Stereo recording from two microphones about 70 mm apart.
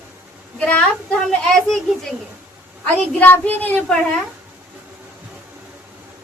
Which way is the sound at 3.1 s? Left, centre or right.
Left.